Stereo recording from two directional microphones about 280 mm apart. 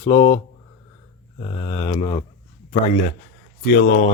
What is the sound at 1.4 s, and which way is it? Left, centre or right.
A man's voice, centre.